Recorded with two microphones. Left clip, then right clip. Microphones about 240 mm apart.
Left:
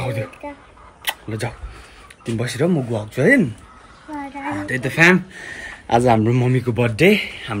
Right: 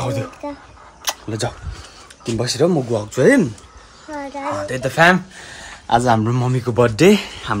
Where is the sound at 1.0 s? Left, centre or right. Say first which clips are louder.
Right 2 dB; right.